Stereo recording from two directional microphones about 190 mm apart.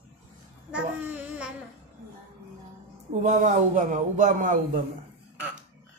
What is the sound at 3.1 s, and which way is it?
Speech, 40° right (ahead or behind).